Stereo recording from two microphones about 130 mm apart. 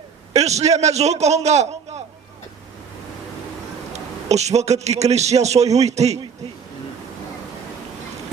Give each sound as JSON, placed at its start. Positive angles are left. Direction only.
{"t": 0.3, "sound": "a man's voice", "side_deg": -55}
{"t": 3.9, "sound": "a man's voice", "side_deg": -60}